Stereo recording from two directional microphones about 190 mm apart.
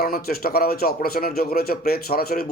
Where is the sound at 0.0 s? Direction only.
50° left (ahead or behind).